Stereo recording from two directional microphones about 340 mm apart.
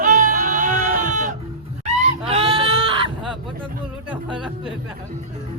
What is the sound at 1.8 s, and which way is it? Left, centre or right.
Screaming, centre.